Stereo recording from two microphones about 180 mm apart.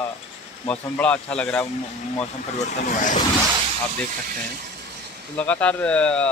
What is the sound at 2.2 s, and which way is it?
Speech, 40° left (ahead or behind).